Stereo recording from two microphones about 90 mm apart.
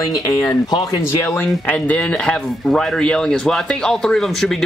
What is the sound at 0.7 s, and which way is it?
Speech, 50° left (ahead or behind).